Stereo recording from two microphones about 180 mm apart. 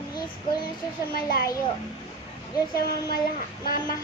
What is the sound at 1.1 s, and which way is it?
Speech, 55° left (ahead or behind).